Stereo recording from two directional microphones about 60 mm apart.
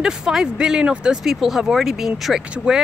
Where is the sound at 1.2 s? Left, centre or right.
Centre.